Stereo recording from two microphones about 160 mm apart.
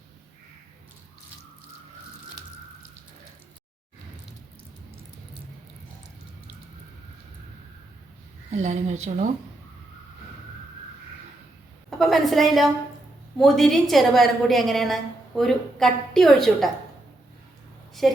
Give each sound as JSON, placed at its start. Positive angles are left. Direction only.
{"t": 8.4, "sound": "speech", "side_deg": -45}
{"t": 11.9, "sound": "a woman's voice", "side_deg": 0}
{"t": 18.0, "sound": "a woman's voice", "side_deg": 0}